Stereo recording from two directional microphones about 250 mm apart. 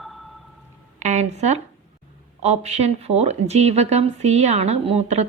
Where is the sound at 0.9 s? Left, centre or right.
Right.